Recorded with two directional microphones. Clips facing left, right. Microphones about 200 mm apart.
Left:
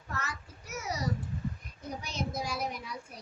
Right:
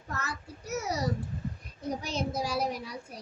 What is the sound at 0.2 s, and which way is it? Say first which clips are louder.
Child singing: right 2 dB; 40° right (ahead or behind).